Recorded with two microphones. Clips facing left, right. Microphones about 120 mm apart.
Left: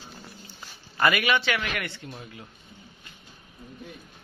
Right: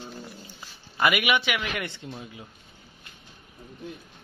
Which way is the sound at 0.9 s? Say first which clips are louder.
Even; 15° right (ahead or behind).